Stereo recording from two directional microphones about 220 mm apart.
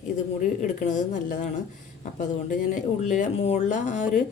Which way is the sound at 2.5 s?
35° left (ahead or behind).